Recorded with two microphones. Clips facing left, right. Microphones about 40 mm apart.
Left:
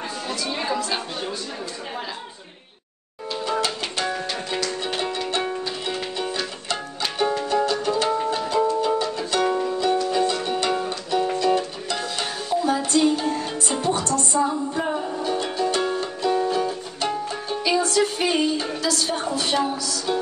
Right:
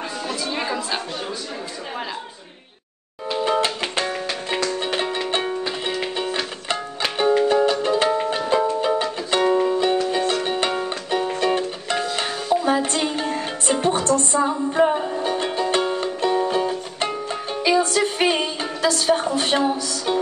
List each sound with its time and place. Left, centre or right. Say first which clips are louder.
0.3 s a sound: even; centre
3.3 s music: right 4 dB; right
10.5 s music: right 1 dB; right